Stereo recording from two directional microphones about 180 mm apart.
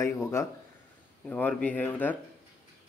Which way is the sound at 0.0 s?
15° left (ahead or behind).